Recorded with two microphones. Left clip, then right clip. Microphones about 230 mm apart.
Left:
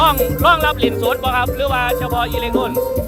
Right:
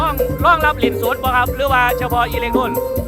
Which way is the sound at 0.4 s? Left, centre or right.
Centre.